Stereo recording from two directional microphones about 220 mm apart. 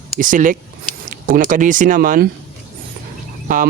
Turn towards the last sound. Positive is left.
turn(degrees=-40)  # may be behind; listen again after turning